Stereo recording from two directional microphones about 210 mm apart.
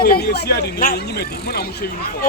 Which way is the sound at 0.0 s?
50° left (ahead or behind).